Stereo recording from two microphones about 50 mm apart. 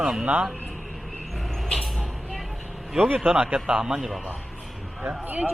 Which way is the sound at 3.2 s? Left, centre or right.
Centre.